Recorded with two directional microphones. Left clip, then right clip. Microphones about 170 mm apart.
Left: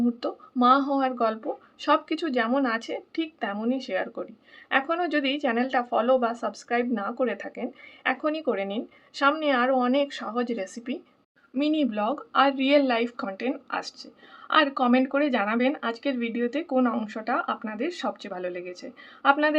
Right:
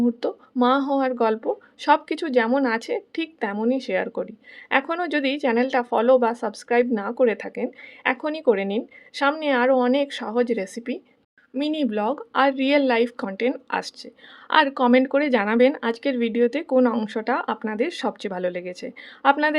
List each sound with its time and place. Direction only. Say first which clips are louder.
0.0 s speech: right 4 dB; 35° right (ahead or behind)